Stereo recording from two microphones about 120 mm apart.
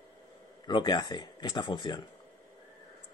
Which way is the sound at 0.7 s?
35° left (ahead or behind).